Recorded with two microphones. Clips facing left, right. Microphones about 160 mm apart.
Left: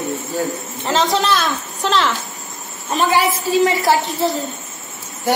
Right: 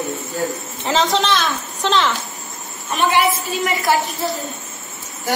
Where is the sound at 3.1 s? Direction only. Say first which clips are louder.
Left 1 dB; 35° left (ahead or behind).